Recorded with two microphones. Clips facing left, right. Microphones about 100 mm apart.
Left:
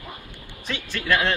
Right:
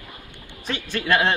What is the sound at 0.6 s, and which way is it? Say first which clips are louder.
Speech: right 2 dB; 35° right (ahead or behind).